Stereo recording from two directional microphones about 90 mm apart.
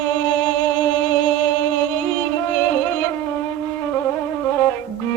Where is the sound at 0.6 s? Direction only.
35° left (ahead or behind).